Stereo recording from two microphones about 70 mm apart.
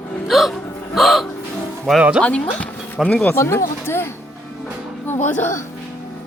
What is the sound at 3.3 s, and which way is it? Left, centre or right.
Speech, left.